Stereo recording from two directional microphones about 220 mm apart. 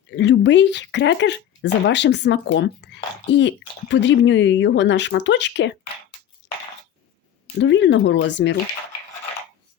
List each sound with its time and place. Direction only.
0.2 s speech: 55° left (ahead or behind)
6.4 s a sound: 55° left (ahead or behind)
7.6 s speech: 55° left (ahead or behind)